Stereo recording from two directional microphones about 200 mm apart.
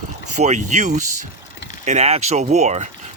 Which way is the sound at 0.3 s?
35° right (ahead or behind).